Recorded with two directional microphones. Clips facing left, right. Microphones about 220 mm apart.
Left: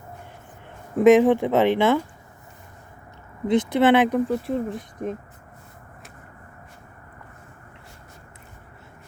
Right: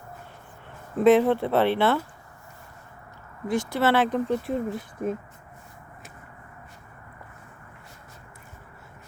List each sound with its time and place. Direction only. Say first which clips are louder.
0.9 s speech: left 4 dB; 15° left (ahead or behind)
3.4 s speech: left 6 dB; 20° left (ahead or behind)
4.3 s speech: left 1 dB; centre (ahead or behind)